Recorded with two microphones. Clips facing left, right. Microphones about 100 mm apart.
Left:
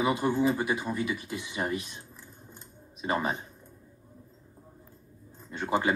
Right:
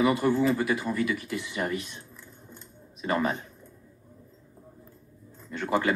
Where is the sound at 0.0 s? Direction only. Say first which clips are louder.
Right 3 dB; 20° left (ahead or behind).